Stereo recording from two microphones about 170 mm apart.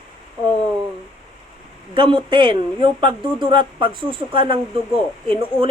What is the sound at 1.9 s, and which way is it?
Speech, 30° right (ahead or behind).